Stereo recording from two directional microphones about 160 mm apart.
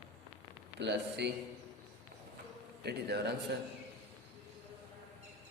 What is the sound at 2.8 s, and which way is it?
Speech, 90° right.